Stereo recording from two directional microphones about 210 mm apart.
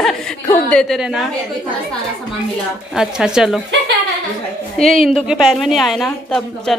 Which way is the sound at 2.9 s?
5° right (ahead or behind).